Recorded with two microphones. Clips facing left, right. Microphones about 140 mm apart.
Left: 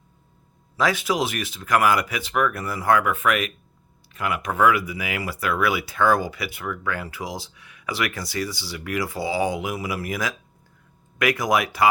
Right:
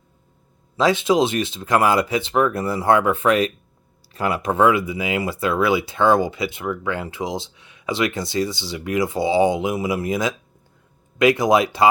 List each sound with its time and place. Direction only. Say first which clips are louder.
0.8 s speech: right 5 dB; 25° right (ahead or behind)